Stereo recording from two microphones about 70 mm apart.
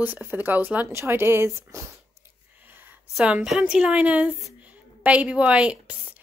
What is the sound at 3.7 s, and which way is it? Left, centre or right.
A woman's voice, centre.